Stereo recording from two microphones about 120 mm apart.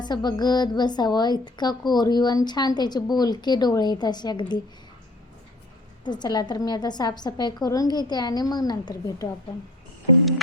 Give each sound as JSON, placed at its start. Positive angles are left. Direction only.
{"t": 0.0, "sound": "a woman's voice", "side_deg": 35}
{"t": 6.1, "sound": "a woman's voice", "side_deg": 35}